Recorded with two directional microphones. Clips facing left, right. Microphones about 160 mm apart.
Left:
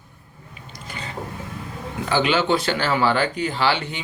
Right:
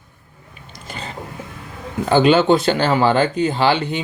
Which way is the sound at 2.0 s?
45° right (ahead or behind).